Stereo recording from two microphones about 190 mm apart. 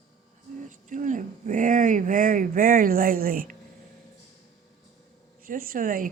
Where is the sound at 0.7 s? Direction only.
45° right (ahead or behind).